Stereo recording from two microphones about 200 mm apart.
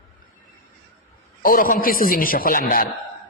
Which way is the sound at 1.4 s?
45° left (ahead or behind).